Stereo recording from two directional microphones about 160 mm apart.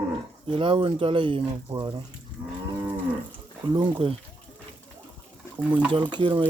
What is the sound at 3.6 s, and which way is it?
Speech, 30° right (ahead or behind).